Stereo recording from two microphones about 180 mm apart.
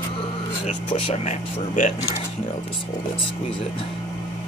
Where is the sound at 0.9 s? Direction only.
30° left (ahead or behind).